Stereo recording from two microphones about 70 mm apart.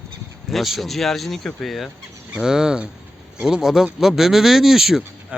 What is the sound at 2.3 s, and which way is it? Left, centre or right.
Speech, centre.